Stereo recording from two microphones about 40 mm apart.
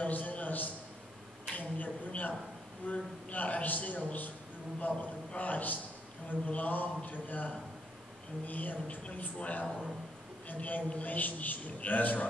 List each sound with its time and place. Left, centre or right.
0.0 s a sound: left
2.9 s a man's voice: left
8.8 s a man's voice: left